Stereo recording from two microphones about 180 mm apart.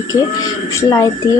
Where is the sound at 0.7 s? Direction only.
15° left (ahead or behind).